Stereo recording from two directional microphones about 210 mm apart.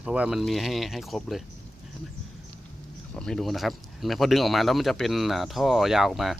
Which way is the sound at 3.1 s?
5° left (ahead or behind).